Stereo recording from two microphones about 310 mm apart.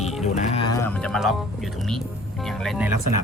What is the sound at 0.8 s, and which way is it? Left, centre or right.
Speech, centre.